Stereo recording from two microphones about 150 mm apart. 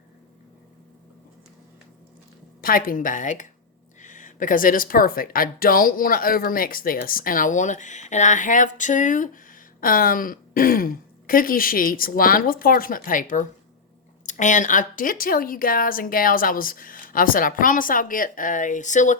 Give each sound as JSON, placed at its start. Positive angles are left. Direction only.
{"t": 2.6, "sound": "a woman's voice", "side_deg": 70}